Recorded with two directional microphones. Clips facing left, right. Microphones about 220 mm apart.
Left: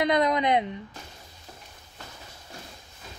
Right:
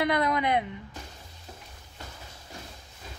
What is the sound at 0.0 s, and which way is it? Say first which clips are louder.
Speech: left 3 dB; 20° left (ahead or behind).